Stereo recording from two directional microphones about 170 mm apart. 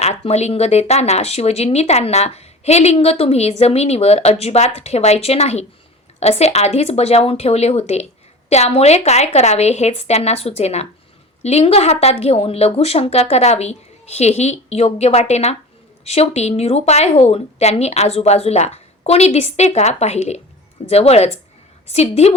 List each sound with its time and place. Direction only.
0.0 s speech: 40° left (ahead or behind)